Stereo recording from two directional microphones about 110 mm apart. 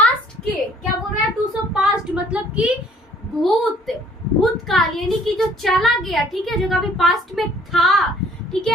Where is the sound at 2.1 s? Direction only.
10° right (ahead or behind).